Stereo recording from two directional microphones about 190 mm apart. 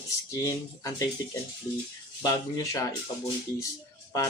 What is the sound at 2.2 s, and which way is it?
Speech, 20° left (ahead or behind).